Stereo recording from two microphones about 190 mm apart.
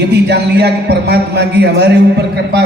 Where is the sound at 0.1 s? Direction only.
60° right (ahead or behind).